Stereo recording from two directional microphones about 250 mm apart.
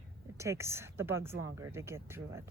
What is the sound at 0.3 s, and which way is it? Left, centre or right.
Speech, centre.